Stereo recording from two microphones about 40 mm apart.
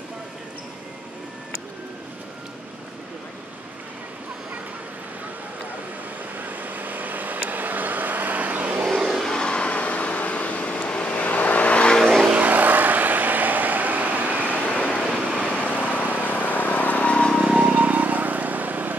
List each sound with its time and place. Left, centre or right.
6.3 s vehicle: right
8.8 s vehicle: centre
9.2 s vehicle: centre
9.7 s vehicle: left
12.3 s vehicle: right
14.5 s vehicle: left
16.3 s vehicle: left
17.6 s vehicle: right